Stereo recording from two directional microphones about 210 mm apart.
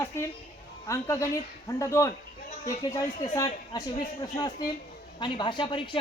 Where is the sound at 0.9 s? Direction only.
15° left (ahead or behind).